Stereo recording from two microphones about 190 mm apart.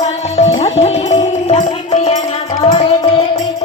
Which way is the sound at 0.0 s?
35° left (ahead or behind).